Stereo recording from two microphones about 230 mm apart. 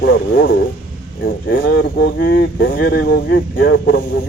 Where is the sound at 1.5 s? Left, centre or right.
Left.